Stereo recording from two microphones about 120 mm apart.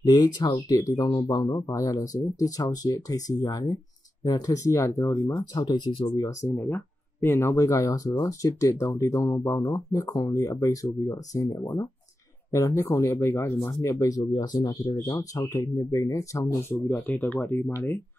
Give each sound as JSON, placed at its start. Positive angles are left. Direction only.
{"t": 0.4, "sound": "speech", "side_deg": 30}
{"t": 12.4, "sound": "speech", "side_deg": 25}